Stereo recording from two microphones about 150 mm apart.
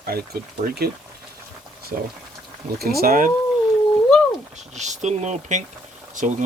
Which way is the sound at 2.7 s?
90° right.